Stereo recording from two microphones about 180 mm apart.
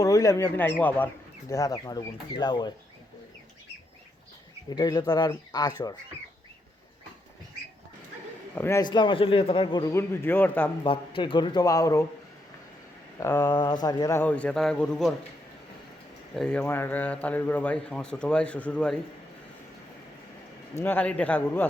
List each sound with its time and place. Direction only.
0.0 s speech: 15° left (ahead or behind)
4.7 s speech: 20° left (ahead or behind)
8.5 s a man's voice: 10° left (ahead or behind)
8.8 s speech: 25° left (ahead or behind)
10.8 s speech: 30° left (ahead or behind)
13.1 s a man's voice: 15° left (ahead or behind)
16.3 s a man's voice: 5° left (ahead or behind)
20.7 s a man's voice: 10° left (ahead or behind)